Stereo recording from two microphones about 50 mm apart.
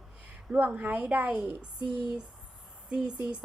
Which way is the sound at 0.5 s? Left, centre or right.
Right.